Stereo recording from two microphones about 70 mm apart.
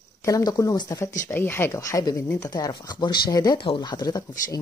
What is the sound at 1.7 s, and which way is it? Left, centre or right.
Speech, left.